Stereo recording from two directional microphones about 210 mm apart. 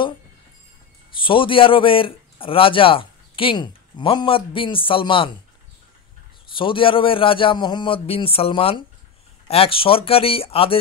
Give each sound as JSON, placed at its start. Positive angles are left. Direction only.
{"t": 1.2, "sound": "speech", "side_deg": 25}
{"t": 6.5, "sound": "speech", "side_deg": 25}